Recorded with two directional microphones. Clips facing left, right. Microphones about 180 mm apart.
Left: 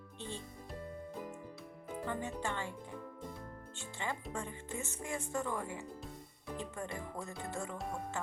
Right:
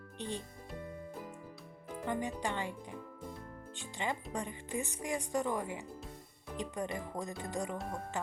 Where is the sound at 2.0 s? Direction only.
15° right (ahead or behind).